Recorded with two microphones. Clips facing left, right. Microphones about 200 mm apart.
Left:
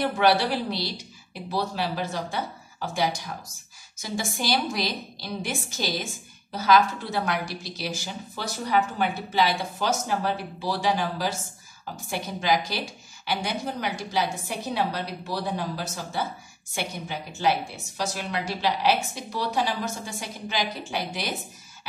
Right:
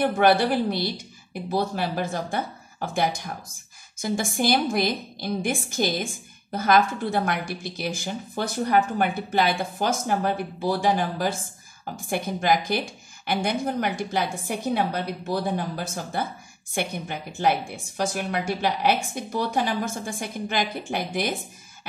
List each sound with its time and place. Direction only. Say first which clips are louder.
0.0 s a woman's voice: right 3 dB; 50° right (ahead or behind)